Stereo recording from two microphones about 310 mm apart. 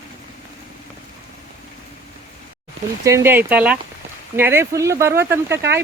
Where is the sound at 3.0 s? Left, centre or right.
Centre.